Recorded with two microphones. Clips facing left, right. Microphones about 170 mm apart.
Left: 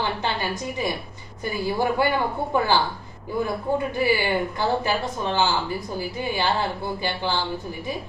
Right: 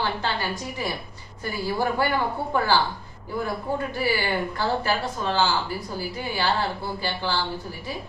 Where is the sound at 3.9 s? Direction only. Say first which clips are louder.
Left 3 dB; 15° left (ahead or behind).